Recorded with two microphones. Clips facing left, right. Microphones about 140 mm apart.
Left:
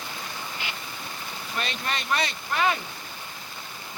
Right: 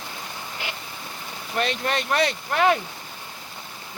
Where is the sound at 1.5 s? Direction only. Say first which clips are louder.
Right 7 dB; 60° right (ahead or behind).